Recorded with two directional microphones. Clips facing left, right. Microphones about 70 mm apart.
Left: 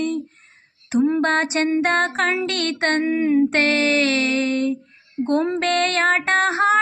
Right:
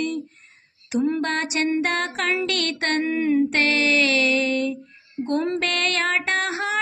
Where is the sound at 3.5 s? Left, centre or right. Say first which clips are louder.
Left 2 dB; left.